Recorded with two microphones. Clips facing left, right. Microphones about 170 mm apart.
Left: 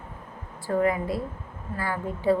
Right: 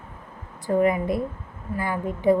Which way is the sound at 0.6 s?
20° right (ahead or behind).